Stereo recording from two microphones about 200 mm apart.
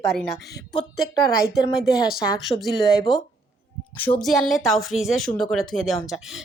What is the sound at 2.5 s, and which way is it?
Speech, 20° left (ahead or behind).